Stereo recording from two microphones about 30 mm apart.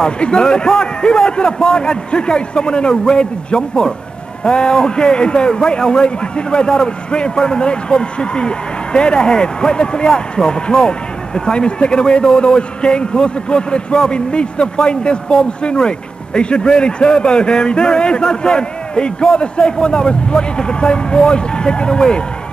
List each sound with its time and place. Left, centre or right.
0.0 s a man's voice: left